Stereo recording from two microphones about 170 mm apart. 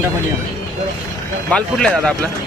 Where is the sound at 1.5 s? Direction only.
5° left (ahead or behind).